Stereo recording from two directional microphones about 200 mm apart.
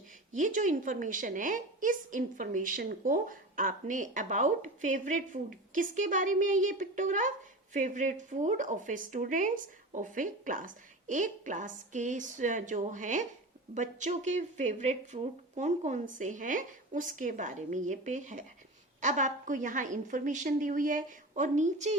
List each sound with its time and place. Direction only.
0.3 s a woman's voice: 40° right (ahead or behind)